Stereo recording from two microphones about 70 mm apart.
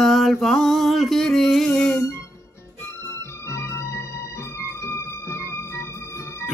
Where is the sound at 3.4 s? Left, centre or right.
Left.